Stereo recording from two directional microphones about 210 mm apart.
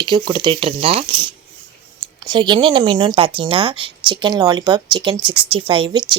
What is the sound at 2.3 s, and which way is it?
Speech, 20° right (ahead or behind).